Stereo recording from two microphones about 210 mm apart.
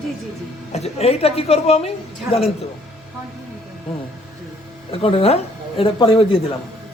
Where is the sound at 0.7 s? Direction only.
30° left (ahead or behind).